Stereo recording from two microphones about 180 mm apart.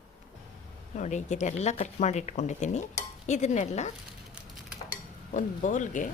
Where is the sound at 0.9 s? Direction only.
40° left (ahead or behind).